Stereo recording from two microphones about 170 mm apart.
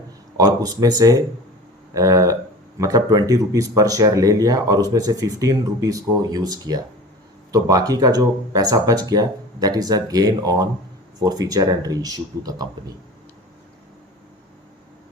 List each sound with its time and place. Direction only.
0.3 s speech: 20° right (ahead or behind)